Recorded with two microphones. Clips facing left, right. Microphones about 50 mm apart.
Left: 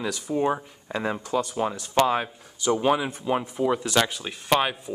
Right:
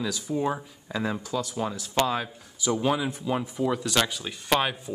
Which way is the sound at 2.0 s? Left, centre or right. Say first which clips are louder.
Left 4 dB; left.